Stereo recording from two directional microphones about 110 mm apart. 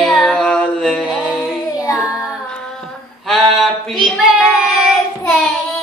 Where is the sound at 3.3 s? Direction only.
Centre (ahead or behind).